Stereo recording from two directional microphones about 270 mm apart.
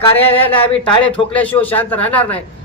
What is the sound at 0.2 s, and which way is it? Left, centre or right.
A man's voice, centre.